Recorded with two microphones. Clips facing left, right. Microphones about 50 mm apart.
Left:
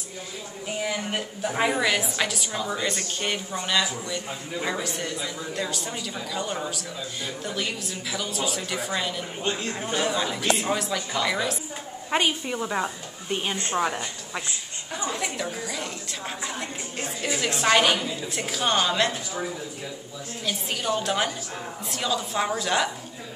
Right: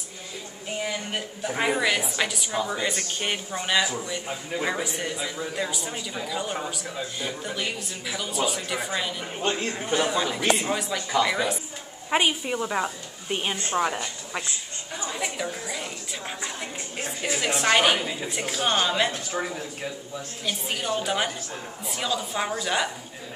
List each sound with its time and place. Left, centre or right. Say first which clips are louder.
0.8 s a woman's voice: left 3 dB; centre
9.5 s a man's voice: right 1 dB; right
9.8 s a woman's voice: right 1 dB; centre
13.7 s a woman's voice: right 1 dB; centre
20.4 s speech: left 1 dB; centre